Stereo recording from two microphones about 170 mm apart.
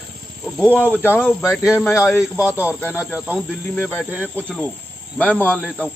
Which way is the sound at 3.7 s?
10° left (ahead or behind).